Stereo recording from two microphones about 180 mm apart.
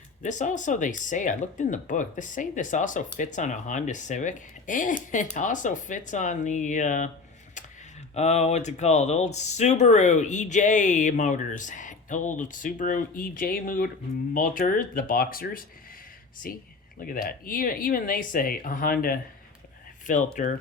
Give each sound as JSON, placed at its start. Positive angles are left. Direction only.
{"t": 0.2, "sound": "speech", "side_deg": 45}
{"t": 8.1, "sound": "speech", "side_deg": 40}